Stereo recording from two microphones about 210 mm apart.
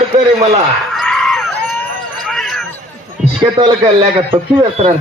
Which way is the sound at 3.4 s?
20° right (ahead or behind).